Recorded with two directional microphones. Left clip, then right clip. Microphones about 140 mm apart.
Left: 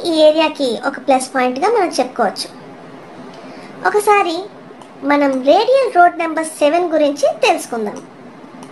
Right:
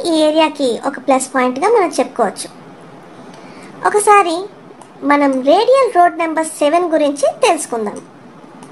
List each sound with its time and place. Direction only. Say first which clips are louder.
0.0 s a woman's voice: left 1 dB; 50° right (ahead or behind)
3.8 s a woman's voice: right 3 dB; 50° right (ahead or behind)